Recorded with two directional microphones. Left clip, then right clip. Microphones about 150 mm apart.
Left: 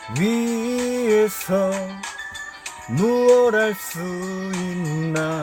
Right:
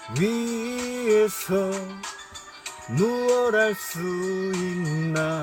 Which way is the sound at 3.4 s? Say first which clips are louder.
Left 4 dB; 20° left (ahead or behind).